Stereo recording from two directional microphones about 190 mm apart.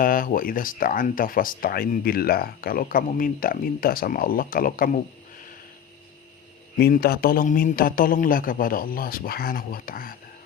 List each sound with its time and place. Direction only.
0.0 s speech: 45° left (ahead or behind)
6.7 s speech: 55° left (ahead or behind)